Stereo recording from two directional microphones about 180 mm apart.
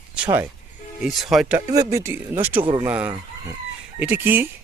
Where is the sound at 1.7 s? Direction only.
20° right (ahead or behind).